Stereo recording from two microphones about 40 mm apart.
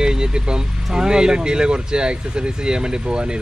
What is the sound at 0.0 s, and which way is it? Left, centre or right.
Speech, centre.